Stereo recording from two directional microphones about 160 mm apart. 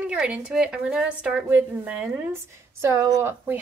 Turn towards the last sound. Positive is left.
turn(degrees=-15)  # may be behind; listen again after turning